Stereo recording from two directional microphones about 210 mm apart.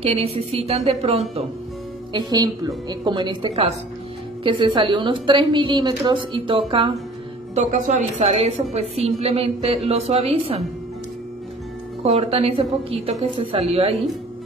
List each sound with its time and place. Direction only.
0.0 s a woman's voice: 30° right (ahead or behind)
2.1 s a woman's voice: 20° right (ahead or behind)
12.0 s a woman's voice: 30° right (ahead or behind)